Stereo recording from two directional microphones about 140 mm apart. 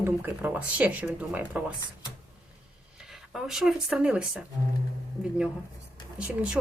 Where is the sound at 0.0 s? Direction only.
10° right (ahead or behind).